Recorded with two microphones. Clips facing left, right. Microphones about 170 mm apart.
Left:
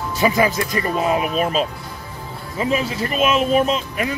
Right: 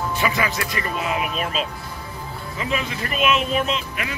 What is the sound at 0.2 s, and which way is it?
Speech, 35° left (ahead or behind).